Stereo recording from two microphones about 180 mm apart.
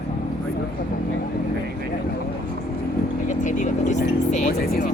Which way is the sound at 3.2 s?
45° left (ahead or behind).